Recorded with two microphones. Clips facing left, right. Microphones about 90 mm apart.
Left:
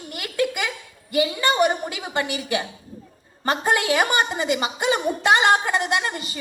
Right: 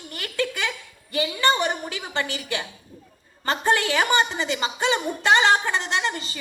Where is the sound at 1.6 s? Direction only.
20° left (ahead or behind).